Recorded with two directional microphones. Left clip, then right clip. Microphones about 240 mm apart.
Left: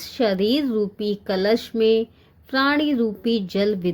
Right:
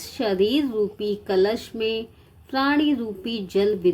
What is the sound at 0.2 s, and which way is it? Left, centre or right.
Speech, left.